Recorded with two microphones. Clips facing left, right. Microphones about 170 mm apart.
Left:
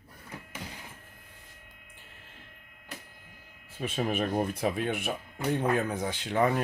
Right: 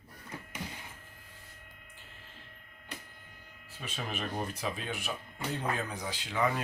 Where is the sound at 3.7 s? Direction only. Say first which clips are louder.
Left 9 dB; 50° left (ahead or behind).